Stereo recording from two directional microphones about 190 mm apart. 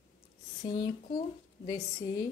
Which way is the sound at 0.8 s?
20° left (ahead or behind).